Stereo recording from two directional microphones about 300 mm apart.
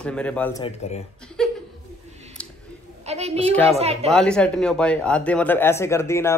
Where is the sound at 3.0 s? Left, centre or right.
Right.